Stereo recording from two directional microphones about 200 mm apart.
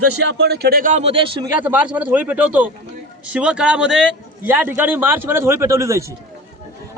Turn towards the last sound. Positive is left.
turn(degrees=-15)  # may be behind; listen again after turning